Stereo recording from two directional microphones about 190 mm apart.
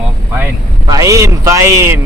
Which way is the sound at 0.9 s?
15° right (ahead or behind).